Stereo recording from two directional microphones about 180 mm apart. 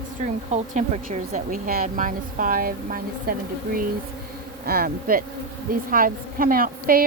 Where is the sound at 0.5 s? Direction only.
40° right (ahead or behind).